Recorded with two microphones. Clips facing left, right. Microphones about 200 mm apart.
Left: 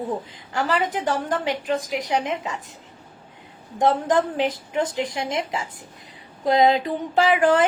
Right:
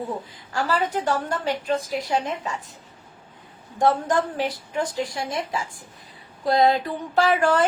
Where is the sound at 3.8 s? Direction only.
15° left (ahead or behind).